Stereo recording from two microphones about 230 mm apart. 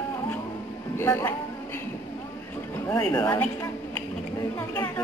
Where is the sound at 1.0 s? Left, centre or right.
Centre.